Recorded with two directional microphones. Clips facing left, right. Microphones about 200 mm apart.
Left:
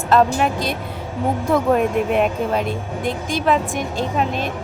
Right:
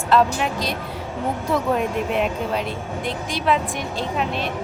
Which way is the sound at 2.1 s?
50° left (ahead or behind).